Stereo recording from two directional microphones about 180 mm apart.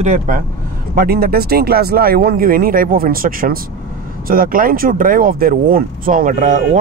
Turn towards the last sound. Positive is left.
turn(degrees=-45)  # may be behind; listen again after turning